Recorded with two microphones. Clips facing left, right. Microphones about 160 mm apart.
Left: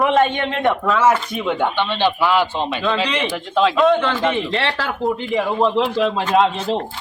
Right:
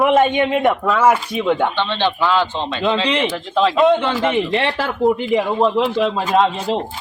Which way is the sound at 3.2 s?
Centre (ahead or behind).